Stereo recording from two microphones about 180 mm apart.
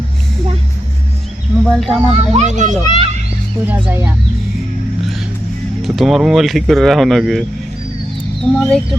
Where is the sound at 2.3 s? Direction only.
40° right (ahead or behind).